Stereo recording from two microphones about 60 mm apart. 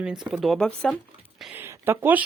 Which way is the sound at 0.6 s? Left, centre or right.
Centre.